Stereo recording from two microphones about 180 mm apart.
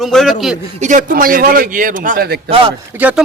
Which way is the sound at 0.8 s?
45° right (ahead or behind).